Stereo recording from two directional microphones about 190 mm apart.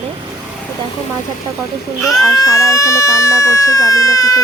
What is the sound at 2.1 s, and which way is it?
Speech, 20° left (ahead or behind).